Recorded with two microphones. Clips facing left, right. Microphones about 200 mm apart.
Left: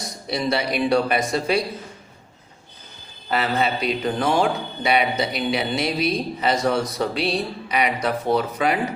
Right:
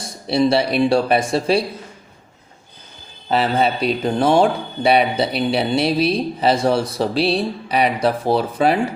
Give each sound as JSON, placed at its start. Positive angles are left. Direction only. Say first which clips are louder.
{"t": 0.0, "sound": "speech", "louder": "right 8 dB", "side_deg": -30}
{"t": 3.2, "sound": "speech", "louder": "right 4 dB", "side_deg": -30}